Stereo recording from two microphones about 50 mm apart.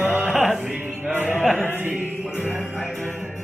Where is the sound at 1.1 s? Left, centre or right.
Right.